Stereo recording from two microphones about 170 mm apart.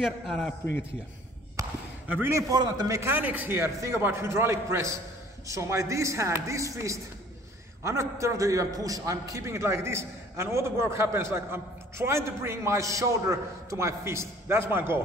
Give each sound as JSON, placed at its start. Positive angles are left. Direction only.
{"t": 0.0, "sound": "a man's voice", "side_deg": 5}
{"t": 1.6, "sound": "a man's voice", "side_deg": -10}